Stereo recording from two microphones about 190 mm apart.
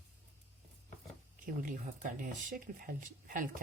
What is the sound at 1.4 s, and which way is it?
Speech, 45° right (ahead or behind).